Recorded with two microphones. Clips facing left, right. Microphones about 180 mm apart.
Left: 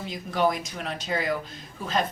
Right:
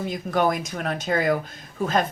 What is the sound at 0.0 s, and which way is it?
Speech, 50° right (ahead or behind).